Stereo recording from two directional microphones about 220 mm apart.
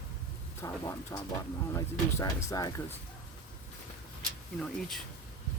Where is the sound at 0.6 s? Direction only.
15° left (ahead or behind).